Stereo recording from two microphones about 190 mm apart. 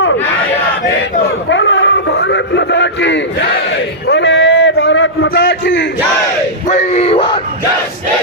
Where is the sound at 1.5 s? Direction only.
75° left (ahead or behind).